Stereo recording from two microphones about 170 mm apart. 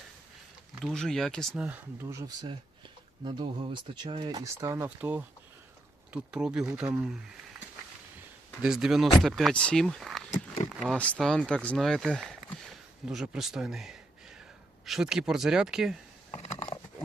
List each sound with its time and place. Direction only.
0.8 s speech: centre (ahead or behind)
1.6 s speech: 10° right (ahead or behind)
6.3 s speech: 5° right (ahead or behind)
8.6 s speech: 5° right (ahead or behind)
16.3 s a sound: 35° left (ahead or behind)